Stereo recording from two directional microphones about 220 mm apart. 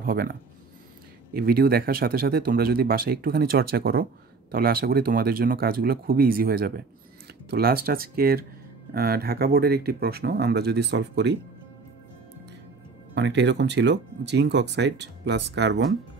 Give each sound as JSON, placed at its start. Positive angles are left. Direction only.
{"t": 0.0, "sound": "speech", "side_deg": -45}
{"t": 13.1, "sound": "speech", "side_deg": -50}